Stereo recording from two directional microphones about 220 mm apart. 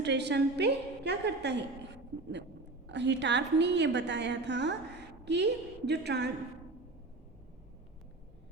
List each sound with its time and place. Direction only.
0.0 s a woman's voice: 50° right (ahead or behind)
2.8 s a woman's voice: 50° right (ahead or behind)